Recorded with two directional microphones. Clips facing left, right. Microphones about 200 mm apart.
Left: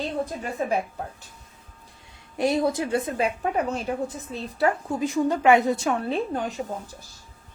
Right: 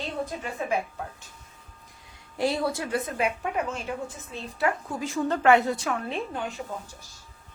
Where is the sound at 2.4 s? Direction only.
15° left (ahead or behind); by 4.7 s 35° left (ahead or behind).